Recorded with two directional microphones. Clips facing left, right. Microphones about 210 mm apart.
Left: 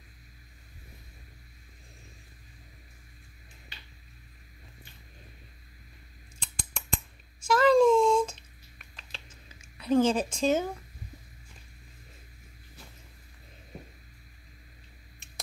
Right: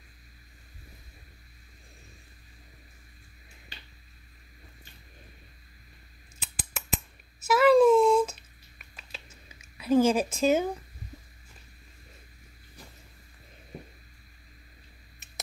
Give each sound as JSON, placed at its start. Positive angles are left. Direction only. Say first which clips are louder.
{"t": 6.4, "sound": "scissors", "louder": "right 1 dB", "side_deg": -5}
{"t": 7.4, "sound": "a sound", "louder": "right 2 dB", "side_deg": -5}
{"t": 9.8, "sound": "a woman's voice", "louder": "right 2 dB", "side_deg": -10}